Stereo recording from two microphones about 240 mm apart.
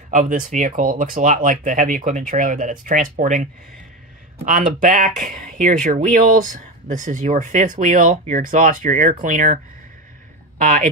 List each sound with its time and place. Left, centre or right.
0.1 s speech: right
4.5 s speech: right
10.6 s speech: right